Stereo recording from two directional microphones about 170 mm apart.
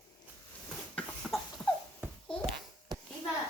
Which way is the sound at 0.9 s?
Centre (ahead or behind).